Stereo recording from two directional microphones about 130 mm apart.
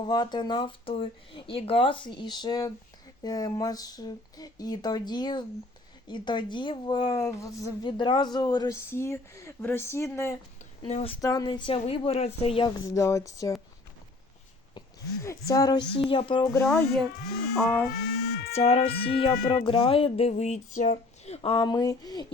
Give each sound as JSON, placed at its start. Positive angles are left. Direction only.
{"t": 0.0, "sound": "speech", "side_deg": 35}
{"t": 7.2, "sound": "speech", "side_deg": 20}
{"t": 7.6, "sound": "speech", "side_deg": 35}
{"t": 10.8, "sound": "speech", "side_deg": 50}
{"t": 11.2, "sound": "speech", "side_deg": 25}
{"t": 12.6, "sound": "speech", "side_deg": 25}
{"t": 14.8, "sound": "speech", "side_deg": 25}
{"t": 16.0, "sound": "speech", "side_deg": 40}
{"t": 16.6, "sound": "speech", "side_deg": 0}
{"t": 18.5, "sound": "speech", "side_deg": 50}